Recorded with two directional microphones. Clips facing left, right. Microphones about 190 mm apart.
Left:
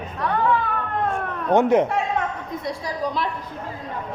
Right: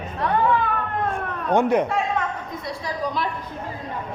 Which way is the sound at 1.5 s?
20° left (ahead or behind).